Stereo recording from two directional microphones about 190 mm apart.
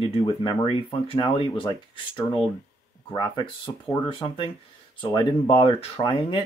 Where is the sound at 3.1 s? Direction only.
20° left (ahead or behind).